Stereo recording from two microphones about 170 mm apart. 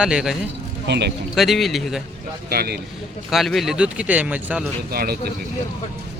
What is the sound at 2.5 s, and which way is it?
Speech, 65° right (ahead or behind).